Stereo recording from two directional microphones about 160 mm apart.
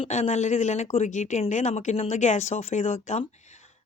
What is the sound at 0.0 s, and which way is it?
Speech, 45° left (ahead or behind).